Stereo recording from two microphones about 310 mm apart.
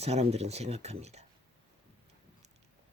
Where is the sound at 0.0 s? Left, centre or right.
Centre.